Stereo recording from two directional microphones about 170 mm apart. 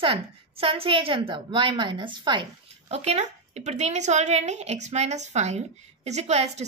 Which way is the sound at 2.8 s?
40° right (ahead or behind).